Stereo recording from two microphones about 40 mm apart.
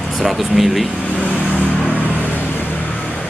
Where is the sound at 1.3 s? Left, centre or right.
Left.